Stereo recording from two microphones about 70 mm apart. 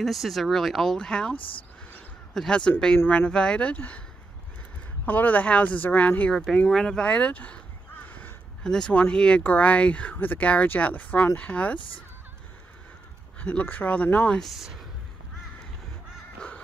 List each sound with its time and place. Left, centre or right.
0.0 s speech: centre
5.0 s speech: left
6.3 s speech: centre
7.1 s crow: centre
8.6 s speech: centre
13.4 s speech: left
14.3 s speech: centre
16.3 s crow: centre